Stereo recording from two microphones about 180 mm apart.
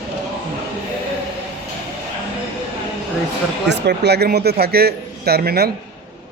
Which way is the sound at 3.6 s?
70° right (ahead or behind).